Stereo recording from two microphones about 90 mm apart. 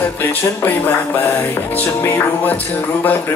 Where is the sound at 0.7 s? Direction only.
20° left (ahead or behind).